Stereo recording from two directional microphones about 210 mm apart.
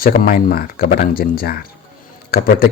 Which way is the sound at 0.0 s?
45° left (ahead or behind).